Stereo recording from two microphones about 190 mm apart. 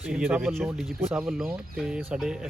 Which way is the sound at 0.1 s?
5° right (ahead or behind).